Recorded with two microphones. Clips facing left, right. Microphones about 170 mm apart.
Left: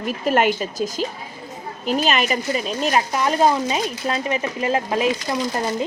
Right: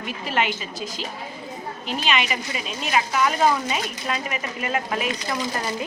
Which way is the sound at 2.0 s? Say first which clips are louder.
Left 4 dB; 40° left (ahead or behind).